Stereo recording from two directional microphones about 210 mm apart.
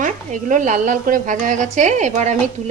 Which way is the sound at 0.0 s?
35° right (ahead or behind).